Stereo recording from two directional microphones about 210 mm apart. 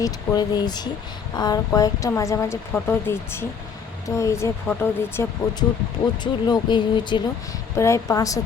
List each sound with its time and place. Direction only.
0.0 s speech: 20° left (ahead or behind)